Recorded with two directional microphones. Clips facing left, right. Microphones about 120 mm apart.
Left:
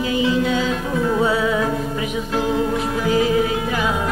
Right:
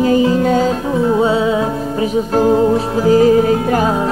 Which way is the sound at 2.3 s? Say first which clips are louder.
Right 8 dB; 40° right (ahead or behind).